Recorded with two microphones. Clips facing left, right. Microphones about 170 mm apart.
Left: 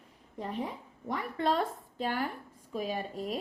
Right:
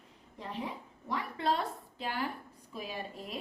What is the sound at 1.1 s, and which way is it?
A woman's voice, 45° left (ahead or behind).